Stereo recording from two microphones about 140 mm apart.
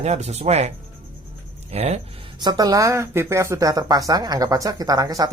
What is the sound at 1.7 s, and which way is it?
Speech, 50° right (ahead or behind).